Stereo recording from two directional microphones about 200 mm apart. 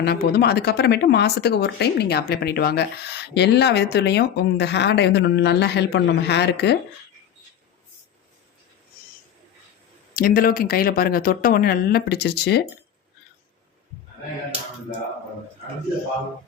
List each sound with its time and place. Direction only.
0.0 s speech: 50° left (ahead or behind)
10.2 s speech: 45° left (ahead or behind)